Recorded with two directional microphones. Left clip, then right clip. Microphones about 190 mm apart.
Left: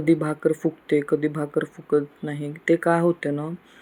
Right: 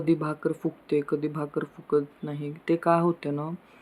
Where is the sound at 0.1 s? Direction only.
5° left (ahead or behind).